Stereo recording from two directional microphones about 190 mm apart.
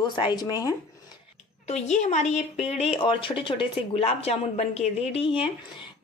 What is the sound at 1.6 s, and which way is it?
Speech, 35° left (ahead or behind).